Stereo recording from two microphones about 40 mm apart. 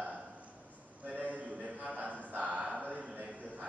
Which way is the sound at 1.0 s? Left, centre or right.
Right.